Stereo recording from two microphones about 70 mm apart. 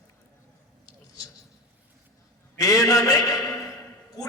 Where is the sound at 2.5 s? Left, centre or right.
Left.